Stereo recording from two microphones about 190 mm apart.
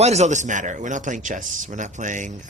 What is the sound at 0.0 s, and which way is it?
A man's voice, 35° right (ahead or behind).